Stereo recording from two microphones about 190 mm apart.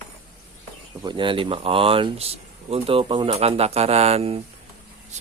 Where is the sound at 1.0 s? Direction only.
25° right (ahead or behind).